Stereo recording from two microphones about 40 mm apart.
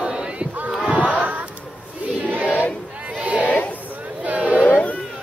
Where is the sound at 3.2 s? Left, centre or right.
Right.